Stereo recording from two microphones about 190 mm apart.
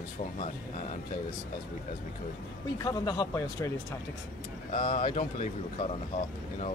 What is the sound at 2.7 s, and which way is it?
Speech, 20° left (ahead or behind).